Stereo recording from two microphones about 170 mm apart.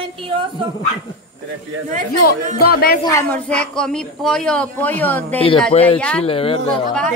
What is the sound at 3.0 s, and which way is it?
Speech, 20° left (ahead or behind).